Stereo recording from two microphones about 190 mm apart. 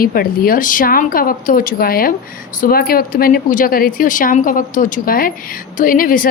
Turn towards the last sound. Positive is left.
turn(degrees=45)  # may be behind; listen again after turning